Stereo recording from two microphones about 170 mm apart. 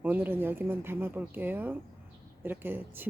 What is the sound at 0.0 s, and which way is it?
A woman's voice, 10° right (ahead or behind).